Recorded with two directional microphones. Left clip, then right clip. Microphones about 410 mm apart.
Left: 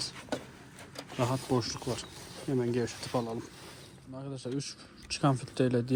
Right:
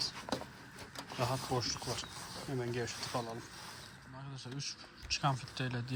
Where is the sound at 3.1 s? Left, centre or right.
Left.